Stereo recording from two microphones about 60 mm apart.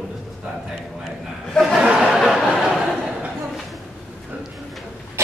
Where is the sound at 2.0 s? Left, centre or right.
Centre.